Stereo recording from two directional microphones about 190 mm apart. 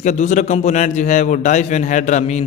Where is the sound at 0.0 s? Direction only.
40° left (ahead or behind).